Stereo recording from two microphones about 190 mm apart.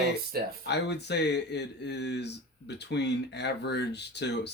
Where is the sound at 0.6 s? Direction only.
65° left (ahead or behind).